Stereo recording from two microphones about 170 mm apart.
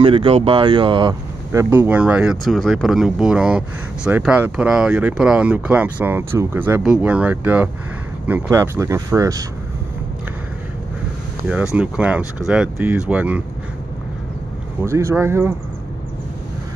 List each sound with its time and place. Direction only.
0.0 s speech: 30° right (ahead or behind)
1.5 s speech: 15° right (ahead or behind)
11.4 s speech: 5° right (ahead or behind)
14.8 s speech: 15° right (ahead or behind)